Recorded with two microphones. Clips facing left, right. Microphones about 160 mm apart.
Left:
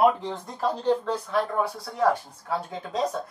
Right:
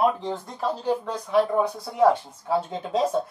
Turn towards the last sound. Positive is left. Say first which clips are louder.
# right 5 dB
turn(degrees=-25)  # may be behind; listen again after turning